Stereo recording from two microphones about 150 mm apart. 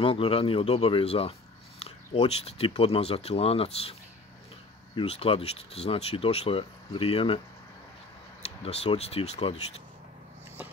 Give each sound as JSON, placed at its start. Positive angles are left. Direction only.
{"t": 0.0, "sound": "speech", "side_deg": 35}
{"t": 4.9, "sound": "speech", "side_deg": 40}
{"t": 8.5, "sound": "speech", "side_deg": 45}